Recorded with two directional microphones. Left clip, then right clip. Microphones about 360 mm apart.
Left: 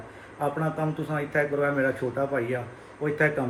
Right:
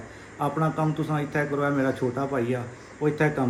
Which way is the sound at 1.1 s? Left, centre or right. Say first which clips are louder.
Left 1 dB; centre.